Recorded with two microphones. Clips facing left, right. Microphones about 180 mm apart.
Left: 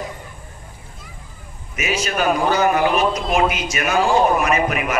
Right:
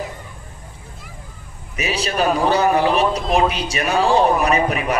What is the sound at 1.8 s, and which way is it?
A man's voice, 35° right (ahead or behind).